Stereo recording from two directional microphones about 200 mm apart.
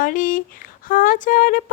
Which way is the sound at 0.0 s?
40° left (ahead or behind).